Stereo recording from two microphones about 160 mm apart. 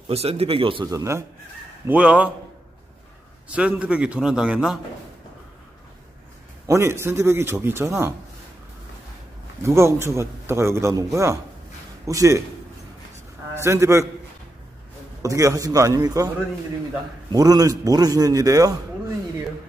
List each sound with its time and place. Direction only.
0.1 s speech: 40° right (ahead or behind)
0.8 s a man's voice: 20° right (ahead or behind)
1.9 s a man's voice: 10° right (ahead or behind)
3.4 s a man's voice: 10° right (ahead or behind)
6.7 s a man's voice: 15° right (ahead or behind)
9.6 s a man's voice: 15° right (ahead or behind)
13.6 s a man's voice: 15° right (ahead or behind)
15.2 s a man's voice: 20° right (ahead or behind)
17.3 s a man's voice: 25° right (ahead or behind)